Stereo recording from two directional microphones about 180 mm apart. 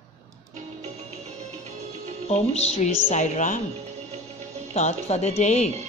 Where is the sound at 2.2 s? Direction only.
35° left (ahead or behind).